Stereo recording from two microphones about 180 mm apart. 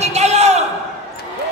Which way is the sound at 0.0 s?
35° right (ahead or behind).